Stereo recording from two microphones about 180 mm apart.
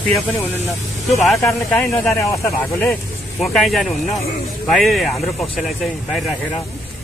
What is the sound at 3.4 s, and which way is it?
Speech, centre (ahead or behind).